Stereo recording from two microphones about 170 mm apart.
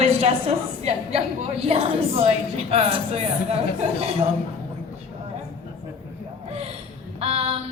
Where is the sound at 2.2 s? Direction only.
35° right (ahead or behind).